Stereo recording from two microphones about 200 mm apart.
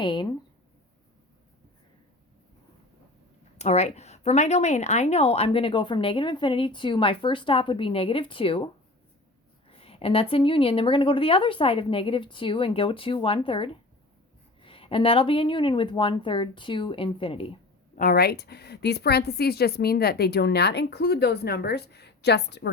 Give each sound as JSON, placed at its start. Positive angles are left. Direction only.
{"t": 0.0, "sound": "a woman's voice", "side_deg": 25}
{"t": 3.6, "sound": "a woman's voice", "side_deg": 35}
{"t": 17.9, "sound": "a woman's voice", "side_deg": 45}